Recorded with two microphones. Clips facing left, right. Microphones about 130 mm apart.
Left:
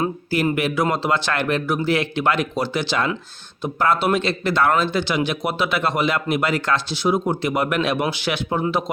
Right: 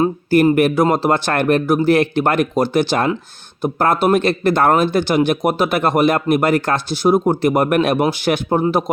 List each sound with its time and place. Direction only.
0.5 s a man's voice: 45° right (ahead or behind)